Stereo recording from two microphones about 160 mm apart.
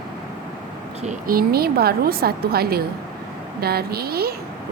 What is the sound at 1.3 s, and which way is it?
A woman's voice, 70° right (ahead or behind).